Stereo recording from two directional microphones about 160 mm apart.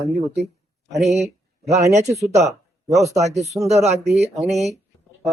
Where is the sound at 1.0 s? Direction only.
45° right (ahead or behind).